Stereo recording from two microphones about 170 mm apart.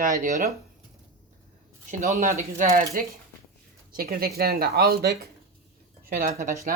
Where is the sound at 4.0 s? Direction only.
60° right (ahead or behind).